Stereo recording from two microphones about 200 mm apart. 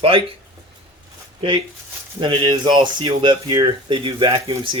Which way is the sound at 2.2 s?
25° right (ahead or behind).